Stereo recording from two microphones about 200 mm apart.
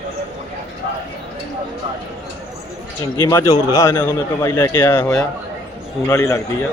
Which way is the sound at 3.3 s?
15° left (ahead or behind).